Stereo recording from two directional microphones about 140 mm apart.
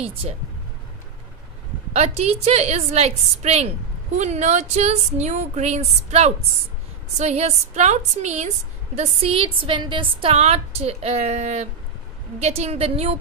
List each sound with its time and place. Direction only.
2.0 s a woman's voice: 50° right (ahead or behind)